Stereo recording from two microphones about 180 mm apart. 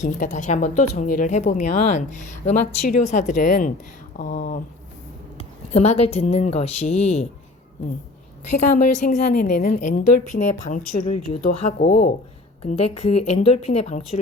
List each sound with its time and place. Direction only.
0.0 s speech: 45° left (ahead or behind)
5.4 s a woman's voice: 35° left (ahead or behind)
8.4 s a woman's voice: 45° left (ahead or behind)